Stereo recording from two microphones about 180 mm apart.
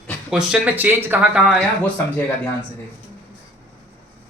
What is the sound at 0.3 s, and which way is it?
Speech, 5° right (ahead or behind).